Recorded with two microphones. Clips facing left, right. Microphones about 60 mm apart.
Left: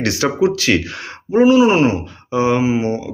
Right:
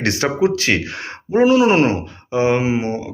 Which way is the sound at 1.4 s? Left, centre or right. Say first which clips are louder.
Left 2 dB; right.